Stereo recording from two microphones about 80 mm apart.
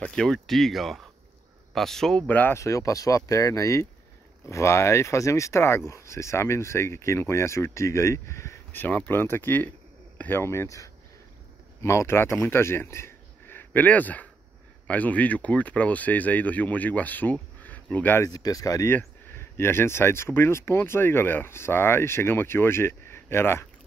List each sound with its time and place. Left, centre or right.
0.0 s speech: centre
2.2 s speech: left
2.5 s speech: left
8.7 s speech: left
18.3 s speech: left
18.9 s speech: left